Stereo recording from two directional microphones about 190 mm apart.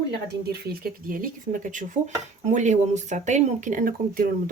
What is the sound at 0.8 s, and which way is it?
Speech, 50° right (ahead or behind).